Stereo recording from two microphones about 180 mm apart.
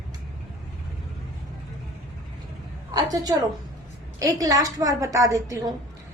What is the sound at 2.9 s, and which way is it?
A woman's voice, 20° right (ahead or behind).